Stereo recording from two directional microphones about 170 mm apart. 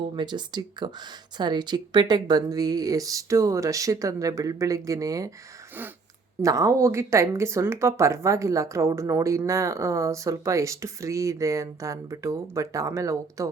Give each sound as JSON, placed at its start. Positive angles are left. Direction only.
{"t": 0.2, "sound": "speech", "side_deg": -25}
{"t": 6.4, "sound": "speech", "side_deg": -20}